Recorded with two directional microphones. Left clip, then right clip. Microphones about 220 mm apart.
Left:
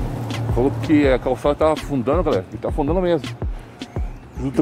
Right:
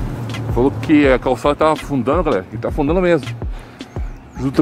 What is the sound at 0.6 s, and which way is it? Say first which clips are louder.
Speech: right 4 dB; 10° right (ahead or behind).